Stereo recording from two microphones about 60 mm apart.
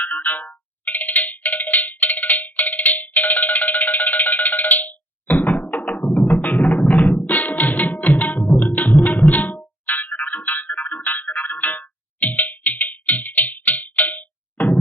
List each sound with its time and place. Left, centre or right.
0.0 s cowbell: left
6.0 s music: centre
6.2 s music: left
7.9 s tabla: left
8.5 s music: left
12.5 s cowbell: left